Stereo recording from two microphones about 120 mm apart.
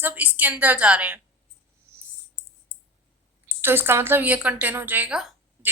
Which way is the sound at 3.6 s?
20° right (ahead or behind).